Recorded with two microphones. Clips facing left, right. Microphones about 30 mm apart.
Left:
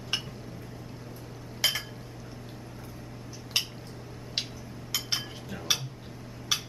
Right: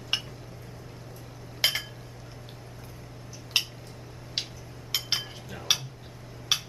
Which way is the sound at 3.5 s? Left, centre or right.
Centre.